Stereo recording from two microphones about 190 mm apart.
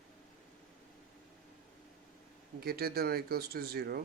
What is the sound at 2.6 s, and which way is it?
Speech, 55° right (ahead or behind).